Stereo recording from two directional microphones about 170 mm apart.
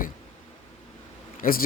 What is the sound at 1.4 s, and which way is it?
Speech, 55° left (ahead or behind).